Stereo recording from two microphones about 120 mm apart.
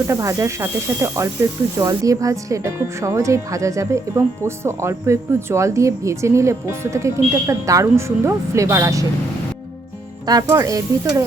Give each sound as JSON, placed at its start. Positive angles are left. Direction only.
{"t": 0.1, "sound": "speech", "side_deg": -25}
{"t": 10.2, "sound": "speech", "side_deg": -30}